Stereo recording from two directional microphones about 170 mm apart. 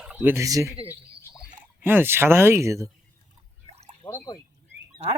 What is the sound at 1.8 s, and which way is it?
Speech, 10° right (ahead or behind).